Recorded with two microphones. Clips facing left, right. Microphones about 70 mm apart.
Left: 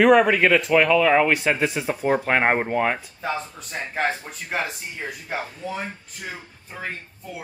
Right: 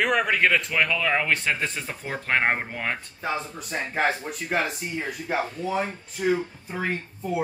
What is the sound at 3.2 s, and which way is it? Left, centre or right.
Speech, centre.